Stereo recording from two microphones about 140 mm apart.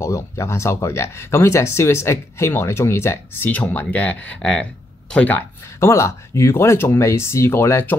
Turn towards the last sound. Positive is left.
turn(degrees=15)  # may be behind; listen again after turning